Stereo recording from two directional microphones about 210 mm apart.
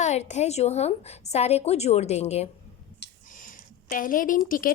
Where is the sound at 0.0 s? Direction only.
35° left (ahead or behind).